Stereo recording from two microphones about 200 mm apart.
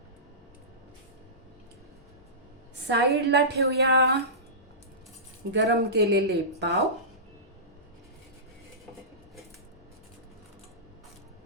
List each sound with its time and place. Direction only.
2.8 s a woman's voice: 55° right (ahead or behind)
5.5 s a woman's voice: 55° right (ahead or behind)